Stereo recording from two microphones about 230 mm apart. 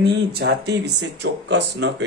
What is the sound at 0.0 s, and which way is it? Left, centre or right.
Speech, right.